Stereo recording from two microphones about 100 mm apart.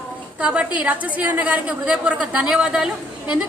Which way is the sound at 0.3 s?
10° right (ahead or behind).